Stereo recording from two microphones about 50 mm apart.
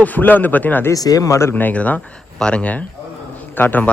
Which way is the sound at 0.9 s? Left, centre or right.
Left.